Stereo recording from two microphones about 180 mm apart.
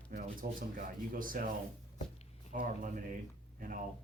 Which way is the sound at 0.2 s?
50° right (ahead or behind).